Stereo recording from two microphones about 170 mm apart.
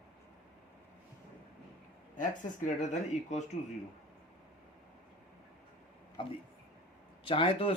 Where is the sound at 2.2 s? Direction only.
45° left (ahead or behind).